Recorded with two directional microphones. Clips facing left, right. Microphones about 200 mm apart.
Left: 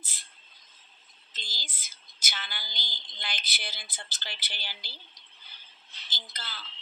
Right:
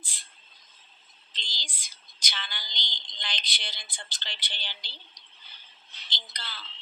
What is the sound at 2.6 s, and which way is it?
Speech, 5° left (ahead or behind).